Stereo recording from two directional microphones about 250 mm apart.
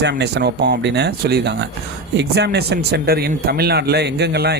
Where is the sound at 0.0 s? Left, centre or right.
Right.